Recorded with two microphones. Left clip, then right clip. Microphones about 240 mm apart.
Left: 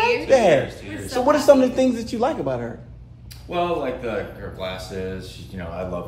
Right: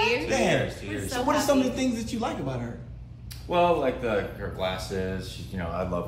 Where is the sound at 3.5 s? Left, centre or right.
Centre.